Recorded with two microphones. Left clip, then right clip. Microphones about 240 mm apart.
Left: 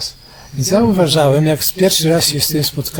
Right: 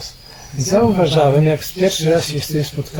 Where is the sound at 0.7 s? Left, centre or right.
Left.